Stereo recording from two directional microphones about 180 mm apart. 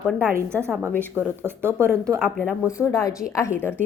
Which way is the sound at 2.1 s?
5° left (ahead or behind).